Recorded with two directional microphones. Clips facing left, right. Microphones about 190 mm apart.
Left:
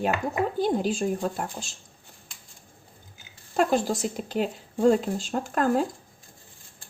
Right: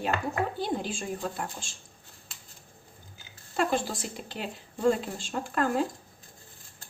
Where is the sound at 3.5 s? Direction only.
40° left (ahead or behind).